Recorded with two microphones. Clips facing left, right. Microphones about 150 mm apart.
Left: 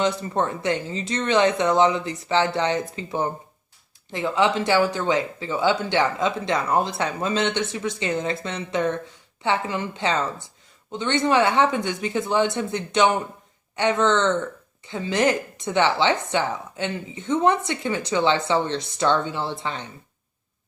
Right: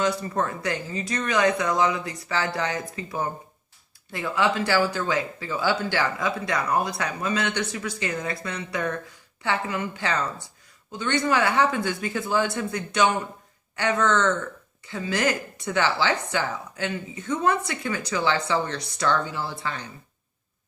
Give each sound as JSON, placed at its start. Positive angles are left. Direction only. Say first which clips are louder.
{"t": 0.0, "sound": "speech", "louder": "left 2 dB", "side_deg": 25}